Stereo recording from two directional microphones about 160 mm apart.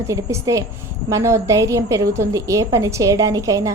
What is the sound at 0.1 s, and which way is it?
A woman's voice, 20° right (ahead or behind).